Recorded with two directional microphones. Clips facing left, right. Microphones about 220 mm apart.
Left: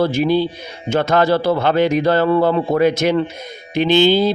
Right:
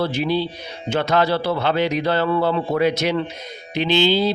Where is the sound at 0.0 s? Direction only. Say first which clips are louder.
Left 5 dB; 45° left (ahead or behind).